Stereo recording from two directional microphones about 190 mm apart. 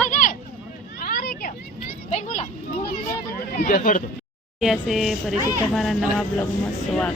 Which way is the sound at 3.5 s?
45° left (ahead or behind).